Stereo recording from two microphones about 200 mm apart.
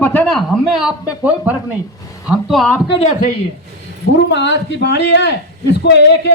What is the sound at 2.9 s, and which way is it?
Speech, 30° left (ahead or behind).